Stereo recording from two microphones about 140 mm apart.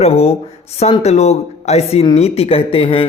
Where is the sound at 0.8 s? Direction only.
50° left (ahead or behind).